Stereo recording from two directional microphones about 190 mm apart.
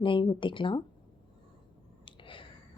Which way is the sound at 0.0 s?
25° left (ahead or behind).